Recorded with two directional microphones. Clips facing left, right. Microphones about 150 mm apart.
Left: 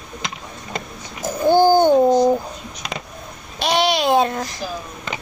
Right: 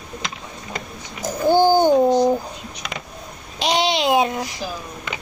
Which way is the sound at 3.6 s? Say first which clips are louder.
Left 1 dB; 15° right (ahead or behind).